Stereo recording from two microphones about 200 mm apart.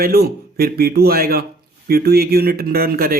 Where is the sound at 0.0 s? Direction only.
50° right (ahead or behind).